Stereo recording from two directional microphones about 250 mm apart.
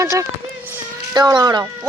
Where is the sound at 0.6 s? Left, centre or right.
Centre.